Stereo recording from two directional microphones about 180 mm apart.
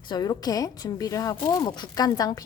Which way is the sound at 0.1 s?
20° left (ahead or behind).